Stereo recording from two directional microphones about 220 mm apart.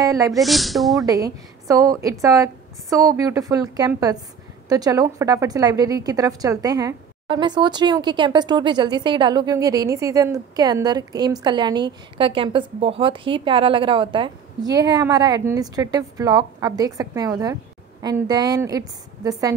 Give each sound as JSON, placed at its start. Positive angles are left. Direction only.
{"t": 0.0, "sound": "speech", "side_deg": -15}
{"t": 0.3, "sound": "speech", "side_deg": 0}
{"t": 1.0, "sound": "a woman's voice", "side_deg": -15}